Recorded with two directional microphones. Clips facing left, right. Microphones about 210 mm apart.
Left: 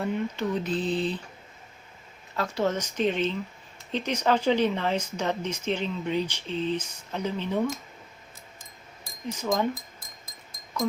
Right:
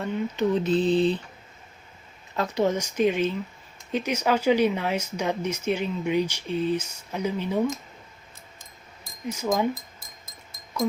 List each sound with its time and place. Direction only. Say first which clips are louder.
0.3 s mantra: right 6 dB; 25° right (ahead or behind)
2.3 s speech: right 3 dB; 20° right (ahead or behind)
9.2 s speech: right 2 dB; 10° right (ahead or behind)